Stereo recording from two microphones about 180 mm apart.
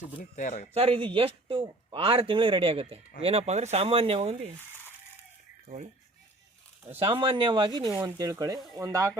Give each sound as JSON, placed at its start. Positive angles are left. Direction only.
{"t": 0.2, "sound": "speech", "side_deg": 45}
{"t": 0.7, "sound": "speech", "side_deg": -30}
{"t": 5.6, "sound": "speech", "side_deg": -40}
{"t": 6.9, "sound": "speech", "side_deg": -30}